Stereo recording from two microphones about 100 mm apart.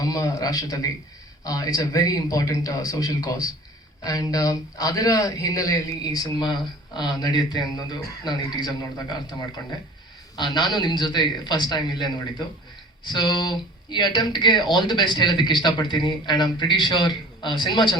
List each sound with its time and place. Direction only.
0.0 s a man's voice: 35° left (ahead or behind)
10.3 s a man's voice: 45° left (ahead or behind)